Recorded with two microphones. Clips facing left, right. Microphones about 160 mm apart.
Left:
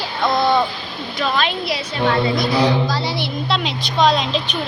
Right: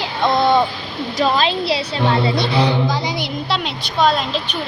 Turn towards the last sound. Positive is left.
turn(degrees=-5)  # may be behind; listen again after turning